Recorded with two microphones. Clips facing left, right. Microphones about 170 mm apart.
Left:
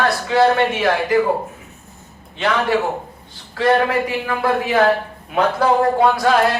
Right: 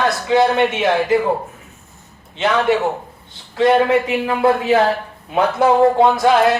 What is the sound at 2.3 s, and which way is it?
Speech, 20° right (ahead or behind).